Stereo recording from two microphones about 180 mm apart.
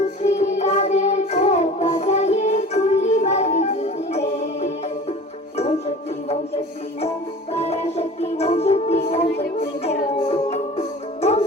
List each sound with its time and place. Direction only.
0.2 s music: 40° left (ahead or behind)
7.5 s music: 35° left (ahead or behind)